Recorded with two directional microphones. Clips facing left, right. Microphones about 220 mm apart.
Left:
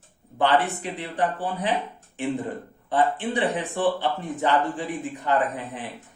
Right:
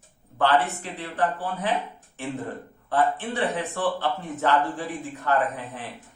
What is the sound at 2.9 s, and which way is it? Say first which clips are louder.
Speech: left 1 dB; 15° left (ahead or behind).